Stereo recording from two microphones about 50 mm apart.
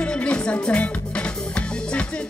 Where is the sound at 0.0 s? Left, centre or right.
Left.